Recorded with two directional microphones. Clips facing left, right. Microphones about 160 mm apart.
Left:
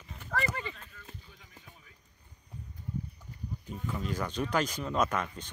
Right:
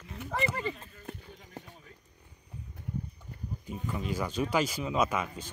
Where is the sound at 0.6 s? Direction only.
30° right (ahead or behind).